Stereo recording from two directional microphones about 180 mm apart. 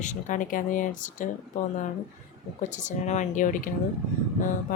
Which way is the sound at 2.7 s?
40° left (ahead or behind).